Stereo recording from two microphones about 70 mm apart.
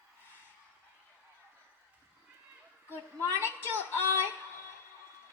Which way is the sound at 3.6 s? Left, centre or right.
Right.